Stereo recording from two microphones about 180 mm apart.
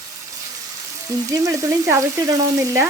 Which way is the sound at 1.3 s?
20° right (ahead or behind).